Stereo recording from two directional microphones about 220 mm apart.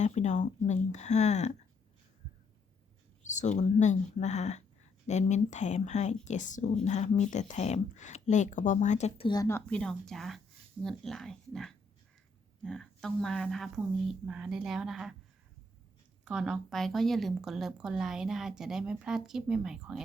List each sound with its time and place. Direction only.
0.0 s speech: 30° left (ahead or behind)
3.2 s speech: 35° left (ahead or behind); by 15.1 s centre (ahead or behind)
16.2 s speech: centre (ahead or behind)